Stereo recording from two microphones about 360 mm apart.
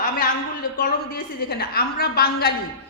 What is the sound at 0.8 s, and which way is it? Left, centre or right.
A woman's voice, left.